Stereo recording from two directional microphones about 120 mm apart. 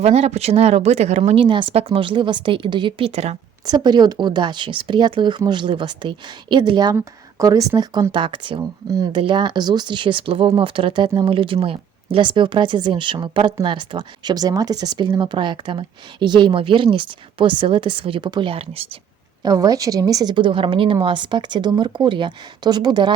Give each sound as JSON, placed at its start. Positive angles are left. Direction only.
{"t": 0.0, "sound": "speech", "side_deg": -60}
{"t": 1.4, "sound": "speech", "side_deg": -40}
{"t": 3.1, "sound": "speech", "side_deg": -65}
{"t": 3.7, "sound": "a woman's voice", "side_deg": -35}
{"t": 6.9, "sound": "a woman's voice", "side_deg": -25}
{"t": 19.4, "sound": "a woman's voice", "side_deg": -30}